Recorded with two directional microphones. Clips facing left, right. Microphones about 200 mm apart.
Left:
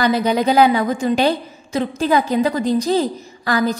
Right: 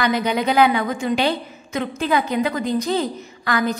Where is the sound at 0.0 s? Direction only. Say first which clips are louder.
Left 4 dB; 35° left (ahead or behind).